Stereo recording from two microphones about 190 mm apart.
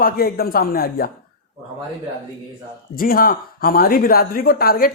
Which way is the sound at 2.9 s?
50° left (ahead or behind).